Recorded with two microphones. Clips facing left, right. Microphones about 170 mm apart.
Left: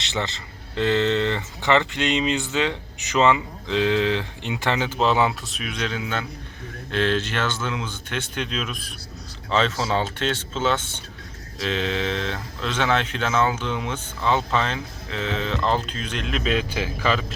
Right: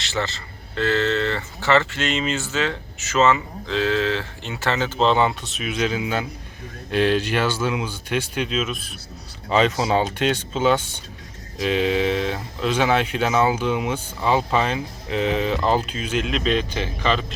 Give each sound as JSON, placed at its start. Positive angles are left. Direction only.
{"t": 0.0, "sound": "speech", "side_deg": 20}
{"t": 9.5, "sound": "speech", "side_deg": -15}